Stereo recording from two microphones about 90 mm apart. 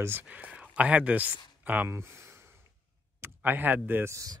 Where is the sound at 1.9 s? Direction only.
30° right (ahead or behind).